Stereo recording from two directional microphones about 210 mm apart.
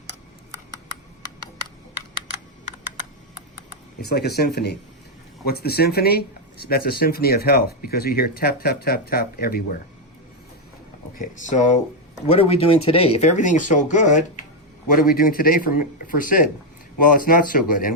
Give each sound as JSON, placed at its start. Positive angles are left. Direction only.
{"t": 4.0, "sound": "speech", "side_deg": 50}
{"t": 11.2, "sound": "speech", "side_deg": 35}